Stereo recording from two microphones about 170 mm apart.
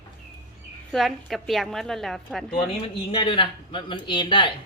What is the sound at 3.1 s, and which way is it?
A man's voice, 30° left (ahead or behind).